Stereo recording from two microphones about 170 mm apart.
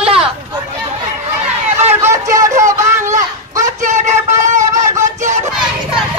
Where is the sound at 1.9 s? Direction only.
15° right (ahead or behind).